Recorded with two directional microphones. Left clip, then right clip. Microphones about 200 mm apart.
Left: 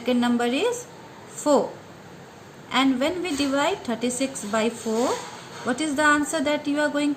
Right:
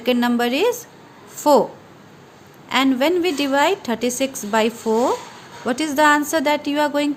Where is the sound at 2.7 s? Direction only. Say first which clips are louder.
Right 5 dB; 50° right (ahead or behind).